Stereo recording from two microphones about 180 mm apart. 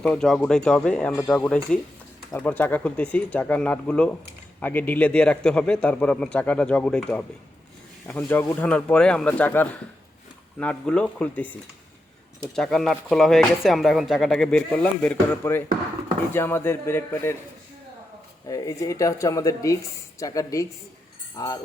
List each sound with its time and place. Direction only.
0.0 s a man's voice: 5° left (ahead or behind)
18.4 s a man's voice: 20° left (ahead or behind)